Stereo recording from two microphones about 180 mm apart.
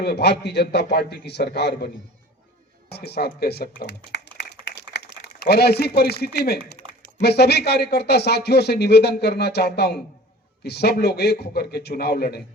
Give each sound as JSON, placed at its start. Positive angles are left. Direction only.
{"t": 0.0, "sound": "a man's voice", "side_deg": 65}
{"t": 2.9, "sound": "speech", "side_deg": 65}